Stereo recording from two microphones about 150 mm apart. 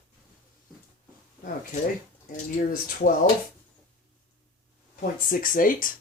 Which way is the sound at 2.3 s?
70° left (ahead or behind).